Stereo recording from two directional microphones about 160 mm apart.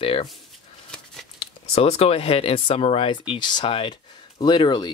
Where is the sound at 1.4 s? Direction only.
40° left (ahead or behind).